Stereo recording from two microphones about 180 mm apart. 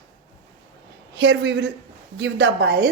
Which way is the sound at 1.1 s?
80° right.